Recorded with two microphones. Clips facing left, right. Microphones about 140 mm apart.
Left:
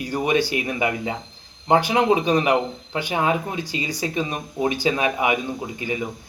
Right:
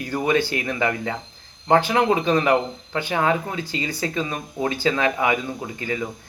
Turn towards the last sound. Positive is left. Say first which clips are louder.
# even
turn(degrees=15)  # may be behind; listen again after turning